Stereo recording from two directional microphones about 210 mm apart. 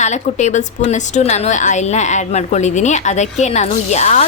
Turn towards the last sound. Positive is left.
turn(degrees=35)  # may be behind; listen again after turning